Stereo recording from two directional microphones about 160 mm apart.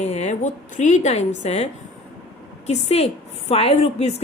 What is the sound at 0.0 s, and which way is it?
A woman's voice, 45° left (ahead or behind).